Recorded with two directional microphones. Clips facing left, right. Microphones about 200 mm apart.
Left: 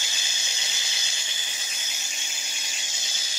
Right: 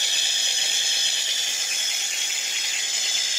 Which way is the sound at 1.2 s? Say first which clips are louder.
Right 2 dB; 80° right.